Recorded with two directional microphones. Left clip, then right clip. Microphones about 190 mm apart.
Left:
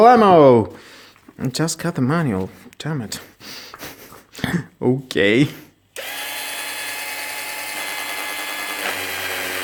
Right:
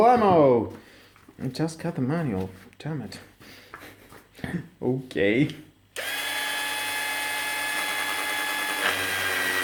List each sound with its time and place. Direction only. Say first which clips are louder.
0.0 s speech: left 8 dB; 50° left (ahead or behind)
1.4 s speech: left 7 dB; 40° left (ahead or behind)
2.7 s a sound: left 9 dB; 40° left (ahead or behind)
4.4 s speech: left 10 dB; 50° left (ahead or behind)
6.0 s drill: left 1 dB; 5° left (ahead or behind)